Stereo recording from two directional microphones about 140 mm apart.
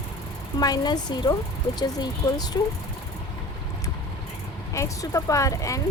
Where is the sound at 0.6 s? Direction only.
30° left (ahead or behind).